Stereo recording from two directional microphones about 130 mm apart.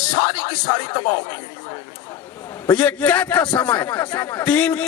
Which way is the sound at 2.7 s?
10° left (ahead or behind).